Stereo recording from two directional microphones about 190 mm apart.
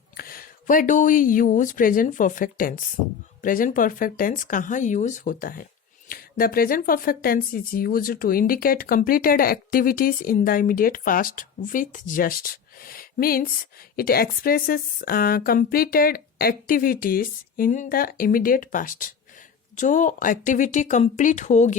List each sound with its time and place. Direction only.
0.2 s speech: 50° left (ahead or behind)